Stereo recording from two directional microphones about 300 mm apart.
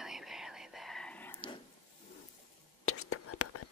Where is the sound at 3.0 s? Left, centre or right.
Left.